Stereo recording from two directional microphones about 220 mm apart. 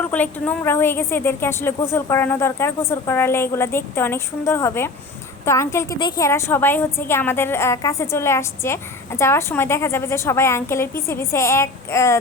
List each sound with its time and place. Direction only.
0.1 s a woman's voice: 5° left (ahead or behind)